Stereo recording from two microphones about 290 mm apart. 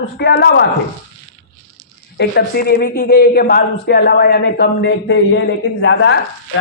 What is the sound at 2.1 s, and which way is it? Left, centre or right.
A man's voice, left.